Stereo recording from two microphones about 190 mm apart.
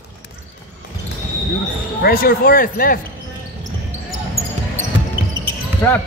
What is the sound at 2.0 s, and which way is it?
Speech, 50° left (ahead or behind).